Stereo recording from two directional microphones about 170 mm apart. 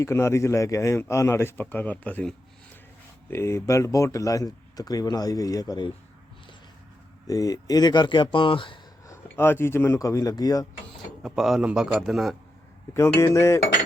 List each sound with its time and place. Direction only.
0.0 s a man's voice: 15° left (ahead or behind)
7.3 s speech: 20° left (ahead or behind)
9.3 s a man's voice: 15° left (ahead or behind)
11.2 s a man's voice: centre (ahead or behind)
13.1 s a man's voice: 15° left (ahead or behind)